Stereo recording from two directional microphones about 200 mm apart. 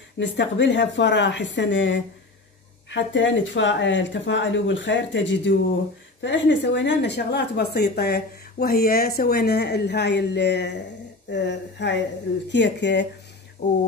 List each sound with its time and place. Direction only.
0.2 s a woman's voice: 65° left (ahead or behind)